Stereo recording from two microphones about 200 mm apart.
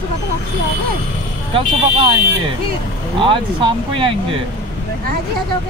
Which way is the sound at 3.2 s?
25° right (ahead or behind).